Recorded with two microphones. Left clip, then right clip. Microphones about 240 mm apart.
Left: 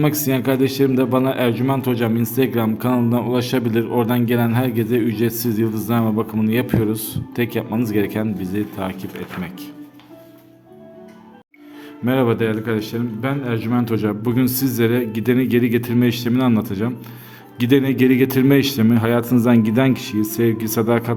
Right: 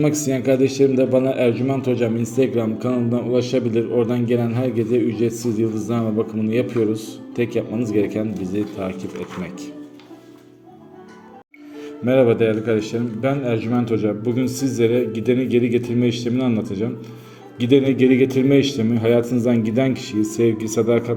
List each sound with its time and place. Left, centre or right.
0.0 s a man's voice: centre
12.0 s a man's voice: centre